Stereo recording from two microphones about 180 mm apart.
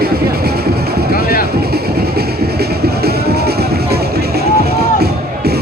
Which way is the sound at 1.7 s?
60° right (ahead or behind).